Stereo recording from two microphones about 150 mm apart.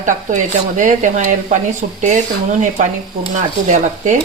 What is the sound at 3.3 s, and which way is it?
Speech, 55° right (ahead or behind).